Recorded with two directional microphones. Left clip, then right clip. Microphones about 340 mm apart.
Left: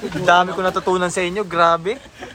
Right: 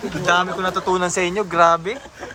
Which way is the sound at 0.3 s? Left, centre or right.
Centre.